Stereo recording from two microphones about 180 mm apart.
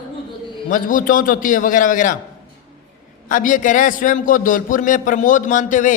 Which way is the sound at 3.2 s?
50° left (ahead or behind).